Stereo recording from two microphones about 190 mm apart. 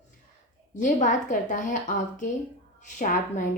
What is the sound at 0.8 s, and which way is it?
A woman's voice, 40° left (ahead or behind).